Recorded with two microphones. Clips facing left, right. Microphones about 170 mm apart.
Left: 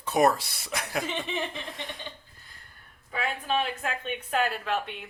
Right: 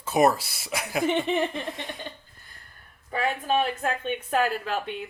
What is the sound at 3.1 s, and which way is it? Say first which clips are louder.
Speech: right 4 dB; 45° right (ahead or behind).